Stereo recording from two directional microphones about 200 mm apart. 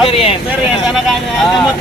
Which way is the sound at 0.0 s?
30° left (ahead or behind).